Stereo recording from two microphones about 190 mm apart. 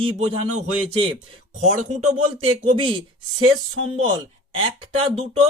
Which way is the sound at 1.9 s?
35° right (ahead or behind).